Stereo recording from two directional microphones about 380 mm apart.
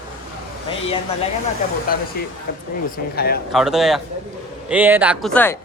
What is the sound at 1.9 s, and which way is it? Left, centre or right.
Speech, left.